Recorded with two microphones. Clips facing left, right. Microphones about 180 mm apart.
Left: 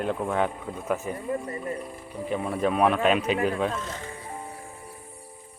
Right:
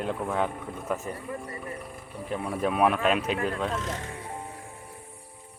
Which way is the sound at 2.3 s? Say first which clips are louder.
Left 2 dB; centre (ahead or behind).